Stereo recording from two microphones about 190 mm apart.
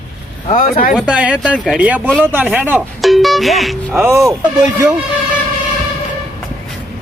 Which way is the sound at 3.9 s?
10° right (ahead or behind).